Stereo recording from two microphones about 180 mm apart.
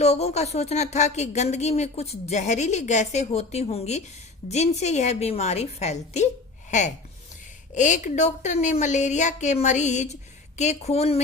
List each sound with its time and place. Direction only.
0.0 s speech: 35° left (ahead or behind)